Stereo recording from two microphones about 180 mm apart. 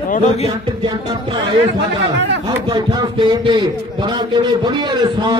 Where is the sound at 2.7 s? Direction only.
25° right (ahead or behind).